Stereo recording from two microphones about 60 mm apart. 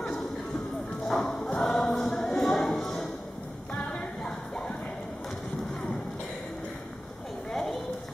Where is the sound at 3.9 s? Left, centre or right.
Centre.